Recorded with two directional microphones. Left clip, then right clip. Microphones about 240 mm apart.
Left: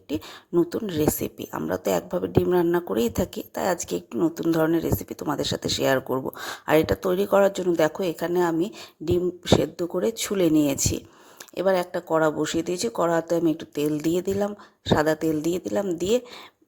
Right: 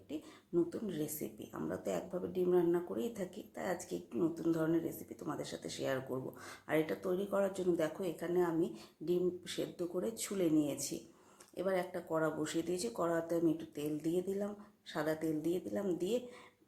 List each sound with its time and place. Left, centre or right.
0.1 s speech: left